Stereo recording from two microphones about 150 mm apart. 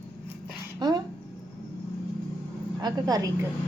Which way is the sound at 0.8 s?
30° right (ahead or behind).